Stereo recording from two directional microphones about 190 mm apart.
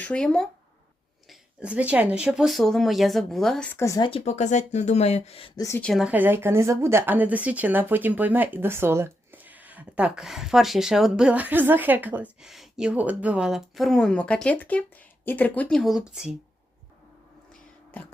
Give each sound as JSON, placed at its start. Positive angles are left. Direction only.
{"t": 0.0, "sound": "speech", "side_deg": 5}
{"t": 4.1, "sound": "speech", "side_deg": 35}
{"t": 5.5, "sound": "a woman's voice", "side_deg": 15}
{"t": 5.9, "sound": "speech", "side_deg": -5}